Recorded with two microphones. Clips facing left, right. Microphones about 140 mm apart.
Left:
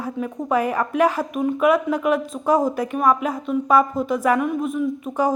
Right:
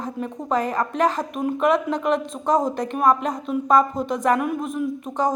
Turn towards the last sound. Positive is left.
turn(degrees=5)  # may be behind; listen again after turning